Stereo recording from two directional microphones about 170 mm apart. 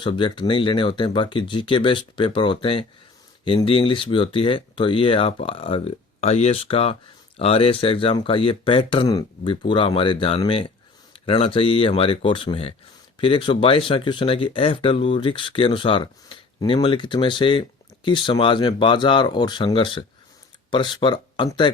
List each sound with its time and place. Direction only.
0.0 s speech: 30° left (ahead or behind)